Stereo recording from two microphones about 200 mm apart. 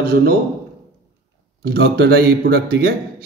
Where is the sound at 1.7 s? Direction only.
55° right (ahead or behind).